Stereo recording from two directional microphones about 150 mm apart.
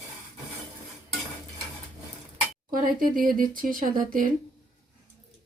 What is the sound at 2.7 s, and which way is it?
Speech, 65° right (ahead or behind).